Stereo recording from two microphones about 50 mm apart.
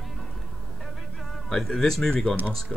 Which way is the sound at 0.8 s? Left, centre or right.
Centre.